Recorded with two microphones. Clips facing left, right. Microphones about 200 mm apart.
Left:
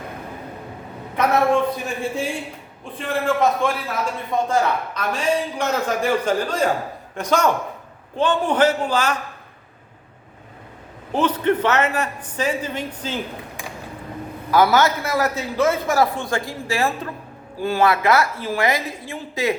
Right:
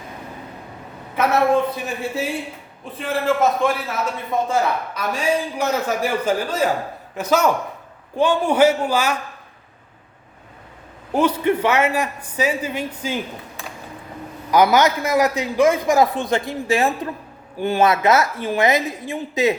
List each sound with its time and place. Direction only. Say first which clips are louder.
1.1 s a sound: even; 5° right (ahead or behind)
3.0 s a man's voice: right 1 dB; 5° right (ahead or behind)
11.1 s a man's voice: right 1 dB; 10° right (ahead or behind)
14.5 s a man's voice: right 1 dB; 15° right (ahead or behind)